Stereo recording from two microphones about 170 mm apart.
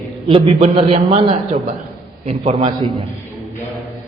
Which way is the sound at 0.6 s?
35° right (ahead or behind).